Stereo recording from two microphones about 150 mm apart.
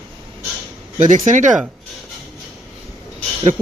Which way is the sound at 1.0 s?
60° right (ahead or behind).